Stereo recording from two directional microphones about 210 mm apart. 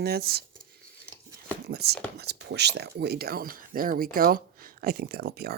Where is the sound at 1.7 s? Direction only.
50° right (ahead or behind).